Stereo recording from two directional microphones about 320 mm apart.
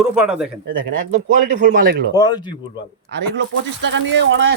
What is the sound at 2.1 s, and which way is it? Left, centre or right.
Speech, centre.